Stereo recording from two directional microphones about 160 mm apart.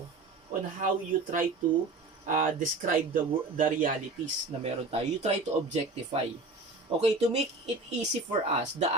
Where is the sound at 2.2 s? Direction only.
55° right (ahead or behind).